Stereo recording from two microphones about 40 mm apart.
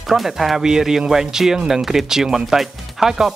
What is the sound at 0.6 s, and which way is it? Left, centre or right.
Speech, centre.